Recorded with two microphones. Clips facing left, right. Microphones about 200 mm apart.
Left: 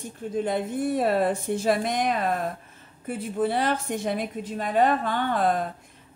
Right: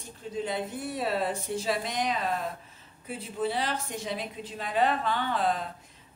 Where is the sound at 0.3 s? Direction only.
55° left (ahead or behind).